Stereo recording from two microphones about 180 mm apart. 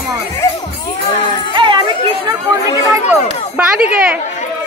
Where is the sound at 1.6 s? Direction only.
25° right (ahead or behind).